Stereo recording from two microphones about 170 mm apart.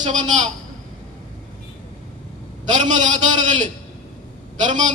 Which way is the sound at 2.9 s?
45° right (ahead or behind).